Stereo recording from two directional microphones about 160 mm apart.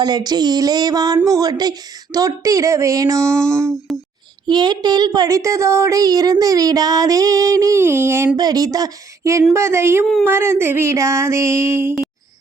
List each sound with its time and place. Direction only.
0.0 s speech: 25° right (ahead or behind)
3.9 s a child's voice: centre (ahead or behind)
4.4 s speech: 30° right (ahead or behind)
9.5 s a sound: 15° right (ahead or behind)